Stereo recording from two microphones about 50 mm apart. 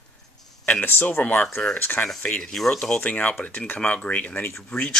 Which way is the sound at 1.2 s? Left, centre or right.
Left.